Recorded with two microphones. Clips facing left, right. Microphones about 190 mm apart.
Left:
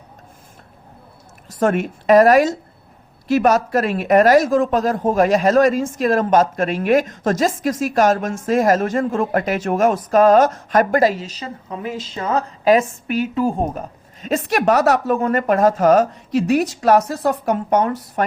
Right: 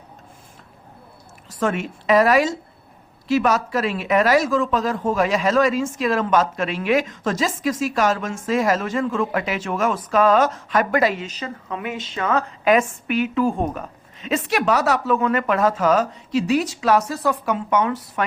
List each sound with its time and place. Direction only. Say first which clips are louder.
1.5 s speech: left 5 dB; 50° left (ahead or behind)